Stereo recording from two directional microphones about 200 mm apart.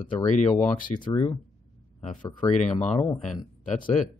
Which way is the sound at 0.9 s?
20° left (ahead or behind).